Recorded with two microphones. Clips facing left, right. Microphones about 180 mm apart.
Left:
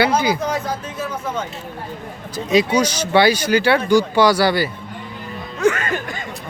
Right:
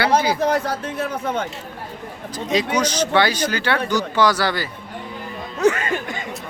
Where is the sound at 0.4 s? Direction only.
60° right (ahead or behind).